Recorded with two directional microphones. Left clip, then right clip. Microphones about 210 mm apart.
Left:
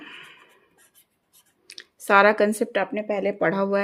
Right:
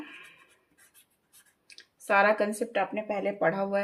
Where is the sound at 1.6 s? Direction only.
55° left (ahead or behind).